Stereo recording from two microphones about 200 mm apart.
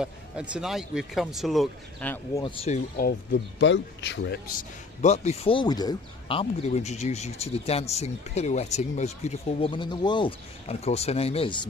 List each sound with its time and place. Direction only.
0.0 s speech: 5° right (ahead or behind)
2.4 s speech: 30° left (ahead or behind)
3.0 s speech: 55° left (ahead or behind)
5.0 s speech: 35° left (ahead or behind)